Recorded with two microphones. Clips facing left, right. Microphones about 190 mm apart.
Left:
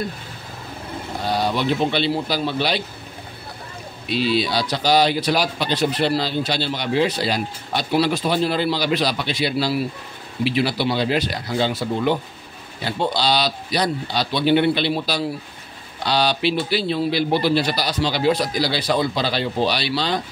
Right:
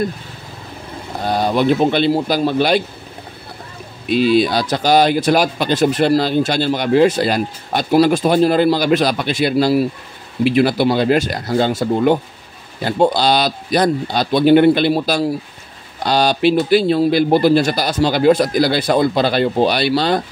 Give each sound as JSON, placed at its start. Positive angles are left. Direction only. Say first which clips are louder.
{"t": 1.2, "sound": "speech", "louder": "right 6 dB", "side_deg": -50}
{"t": 4.1, "sound": "speech", "louder": "right 7 dB", "side_deg": -50}